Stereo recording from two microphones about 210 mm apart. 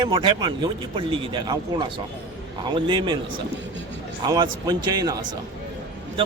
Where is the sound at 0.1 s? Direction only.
25° right (ahead or behind).